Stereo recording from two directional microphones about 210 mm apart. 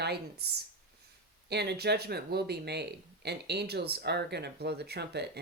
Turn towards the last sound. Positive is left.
turn(degrees=-50)  # may be behind; listen again after turning